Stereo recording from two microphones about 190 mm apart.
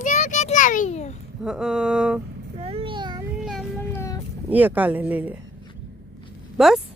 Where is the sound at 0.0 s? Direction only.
40° left (ahead or behind).